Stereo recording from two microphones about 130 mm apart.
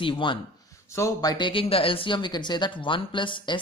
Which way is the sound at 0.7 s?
25° left (ahead or behind).